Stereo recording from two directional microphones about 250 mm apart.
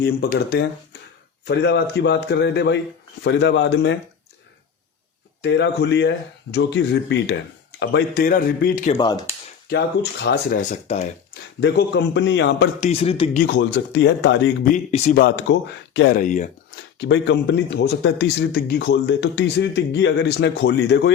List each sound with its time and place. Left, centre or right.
0.0 s a man's voice: left
5.4 s a man's voice: left
9.0 s speech: centre
9.6 s speech: left
10.6 s a man's voice: left
11.6 s a man's voice: left
12.8 s a man's voice: left
13.4 s a man's voice: left
14.7 s a man's voice: left
15.1 s speech: left
16.1 s speech: left
17.0 s a man's voice: left